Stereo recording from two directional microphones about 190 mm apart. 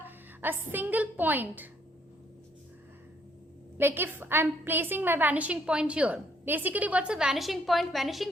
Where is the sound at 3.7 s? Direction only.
10° right (ahead or behind).